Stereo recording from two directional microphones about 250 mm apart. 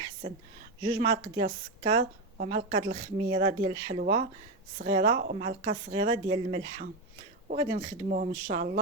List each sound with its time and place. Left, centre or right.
0.8 s a woman's voice: centre
2.0 s a woman's voice: right
2.7 s a woman's voice: right
8.1 s speech: right